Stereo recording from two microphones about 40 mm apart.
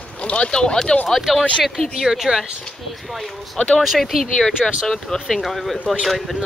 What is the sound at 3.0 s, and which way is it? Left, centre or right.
Speech, centre.